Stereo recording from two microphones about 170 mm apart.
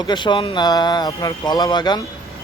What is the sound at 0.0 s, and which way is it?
Speech, 25° left (ahead or behind).